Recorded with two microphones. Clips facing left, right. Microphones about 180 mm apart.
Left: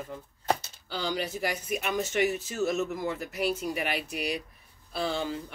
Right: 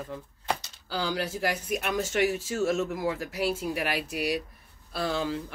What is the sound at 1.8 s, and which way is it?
Speech, 55° right (ahead or behind).